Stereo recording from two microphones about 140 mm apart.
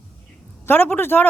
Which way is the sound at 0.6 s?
15° left (ahead or behind).